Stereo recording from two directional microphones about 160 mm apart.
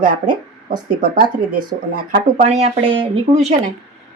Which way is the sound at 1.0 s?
65° right (ahead or behind).